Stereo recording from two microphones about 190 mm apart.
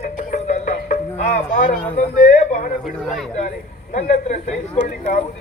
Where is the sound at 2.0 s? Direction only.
40° left (ahead or behind).